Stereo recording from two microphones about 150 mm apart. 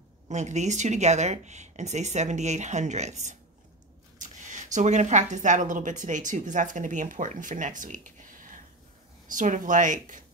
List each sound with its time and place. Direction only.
0.3 s speech: 50° right (ahead or behind)